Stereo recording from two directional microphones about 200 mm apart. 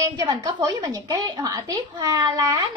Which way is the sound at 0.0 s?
20° right (ahead or behind).